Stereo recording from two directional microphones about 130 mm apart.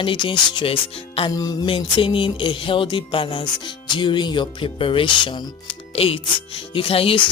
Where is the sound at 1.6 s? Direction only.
40° left (ahead or behind).